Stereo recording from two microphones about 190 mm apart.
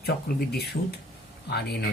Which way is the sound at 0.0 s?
55° left (ahead or behind).